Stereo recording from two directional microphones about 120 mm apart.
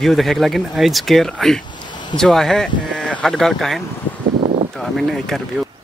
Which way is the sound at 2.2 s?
Centre (ahead or behind).